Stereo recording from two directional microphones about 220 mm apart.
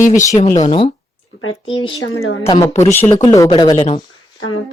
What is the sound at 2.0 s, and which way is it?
Speech, 60° left (ahead or behind).